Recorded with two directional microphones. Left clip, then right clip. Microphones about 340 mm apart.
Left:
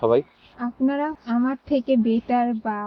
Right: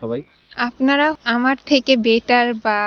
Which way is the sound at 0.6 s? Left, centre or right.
Centre.